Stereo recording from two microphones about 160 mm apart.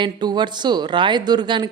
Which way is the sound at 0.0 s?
25° right (ahead or behind).